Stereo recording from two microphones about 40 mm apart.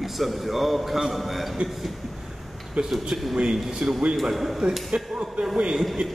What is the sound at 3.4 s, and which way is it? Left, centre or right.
A man's voice, centre.